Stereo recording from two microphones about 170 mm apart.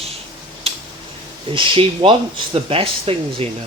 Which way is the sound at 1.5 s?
30° right (ahead or behind).